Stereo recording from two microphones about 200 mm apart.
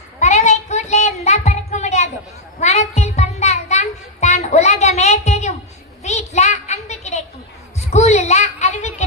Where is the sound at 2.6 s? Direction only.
35° left (ahead or behind).